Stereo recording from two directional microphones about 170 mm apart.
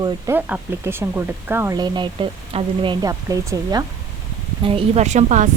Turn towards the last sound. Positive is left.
turn(degrees=-45)  # may be behind; listen again after turning